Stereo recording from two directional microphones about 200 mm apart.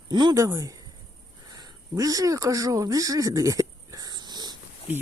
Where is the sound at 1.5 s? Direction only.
15° right (ahead or behind).